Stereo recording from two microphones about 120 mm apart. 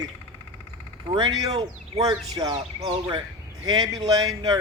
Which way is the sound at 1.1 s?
35° right (ahead or behind).